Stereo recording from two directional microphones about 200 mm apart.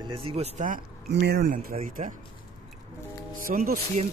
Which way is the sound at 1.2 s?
50° right (ahead or behind).